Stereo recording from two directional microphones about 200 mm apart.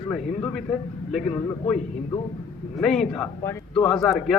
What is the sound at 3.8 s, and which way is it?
Speech, 5° left (ahead or behind).